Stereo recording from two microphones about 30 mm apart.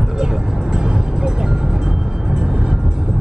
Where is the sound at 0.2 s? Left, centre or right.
Right.